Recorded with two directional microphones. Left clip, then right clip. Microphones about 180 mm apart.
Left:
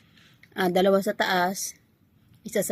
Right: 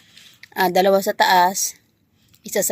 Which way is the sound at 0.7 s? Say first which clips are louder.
Right 4 dB; 20° left (ahead or behind).